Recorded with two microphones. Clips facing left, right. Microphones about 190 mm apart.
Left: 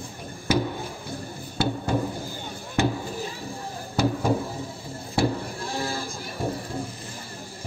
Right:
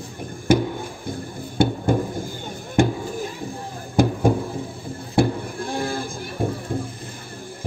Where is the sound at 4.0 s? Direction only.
50° right (ahead or behind).